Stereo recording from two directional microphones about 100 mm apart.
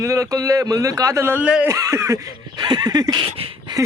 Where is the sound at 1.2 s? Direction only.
15° right (ahead or behind).